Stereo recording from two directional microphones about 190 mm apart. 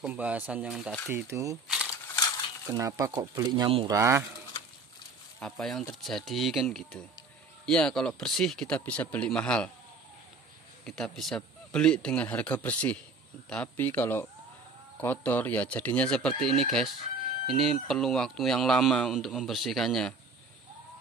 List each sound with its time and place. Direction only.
0.0 s speech: 5° right (ahead or behind)
1.1 s speech: 15° right (ahead or behind)
2.7 s speech: 20° right (ahead or behind)
5.4 s speech: centre (ahead or behind)
10.9 s speech: centre (ahead or behind)